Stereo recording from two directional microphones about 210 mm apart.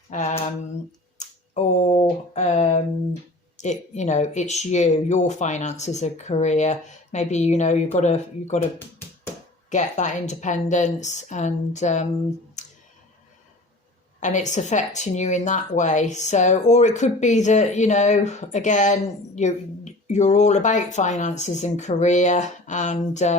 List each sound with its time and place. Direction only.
0.1 s speech: 35° left (ahead or behind)
9.6 s speech: 35° left (ahead or behind)
12.6 s clicking: 35° left (ahead or behind)
14.2 s speech: 35° left (ahead or behind)